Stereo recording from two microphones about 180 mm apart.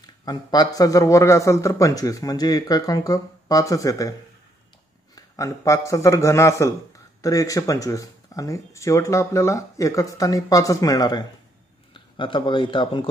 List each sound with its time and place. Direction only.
0.0 s a man's voice: 20° left (ahead or behind)
5.1 s a man's voice: 20° left (ahead or behind)